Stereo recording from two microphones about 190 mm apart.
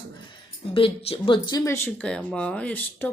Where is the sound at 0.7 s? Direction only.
30° left (ahead or behind).